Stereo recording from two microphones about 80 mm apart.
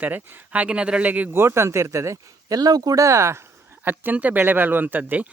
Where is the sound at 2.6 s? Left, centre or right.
Right.